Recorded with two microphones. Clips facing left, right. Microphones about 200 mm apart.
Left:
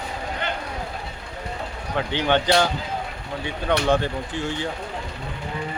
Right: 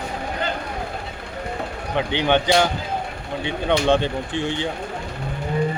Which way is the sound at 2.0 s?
20° right (ahead or behind).